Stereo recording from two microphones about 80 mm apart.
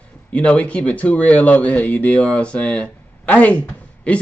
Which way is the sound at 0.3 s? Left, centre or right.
Centre.